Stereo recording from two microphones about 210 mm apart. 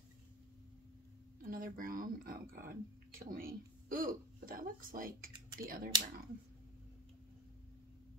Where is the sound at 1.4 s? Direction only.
40° right (ahead or behind).